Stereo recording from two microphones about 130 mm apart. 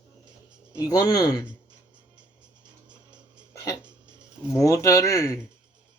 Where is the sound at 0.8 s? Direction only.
30° left (ahead or behind).